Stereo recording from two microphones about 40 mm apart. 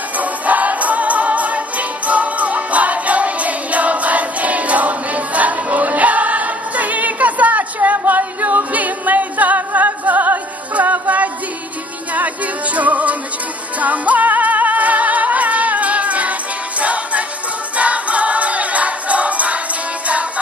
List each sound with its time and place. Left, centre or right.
0.2 s music: right
10.7 s music: right
12.7 s music: right
17.7 s choir: right